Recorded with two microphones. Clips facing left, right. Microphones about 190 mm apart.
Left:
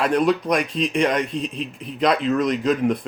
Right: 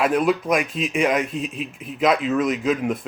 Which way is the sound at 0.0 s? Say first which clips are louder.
Even; 5° right (ahead or behind).